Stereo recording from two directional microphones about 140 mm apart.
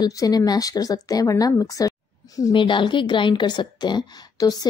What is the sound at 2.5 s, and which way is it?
A woman's voice, 35° left (ahead or behind).